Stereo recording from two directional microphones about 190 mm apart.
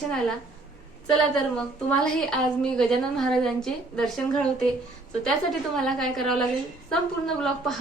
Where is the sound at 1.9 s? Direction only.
5° left (ahead or behind).